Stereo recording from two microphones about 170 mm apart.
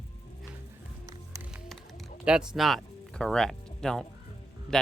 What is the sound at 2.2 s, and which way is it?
Speech, 5° right (ahead or behind).